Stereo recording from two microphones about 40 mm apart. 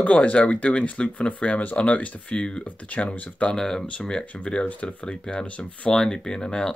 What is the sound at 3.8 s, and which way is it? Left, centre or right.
Speech, left.